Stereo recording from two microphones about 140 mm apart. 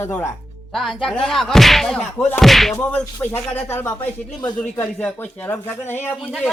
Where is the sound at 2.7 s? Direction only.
10° left (ahead or behind).